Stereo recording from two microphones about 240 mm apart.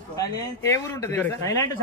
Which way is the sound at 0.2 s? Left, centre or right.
Centre.